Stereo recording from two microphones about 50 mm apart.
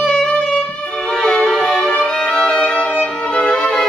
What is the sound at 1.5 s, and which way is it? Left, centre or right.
Violin, centre.